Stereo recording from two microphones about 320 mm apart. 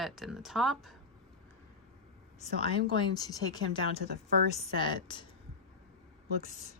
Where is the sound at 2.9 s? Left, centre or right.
Centre.